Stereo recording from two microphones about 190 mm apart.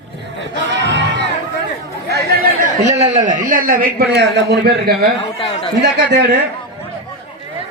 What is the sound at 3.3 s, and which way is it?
A man's voice, 45° right (ahead or behind).